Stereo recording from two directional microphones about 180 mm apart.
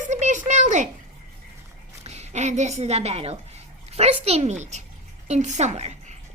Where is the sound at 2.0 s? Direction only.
35° right (ahead or behind).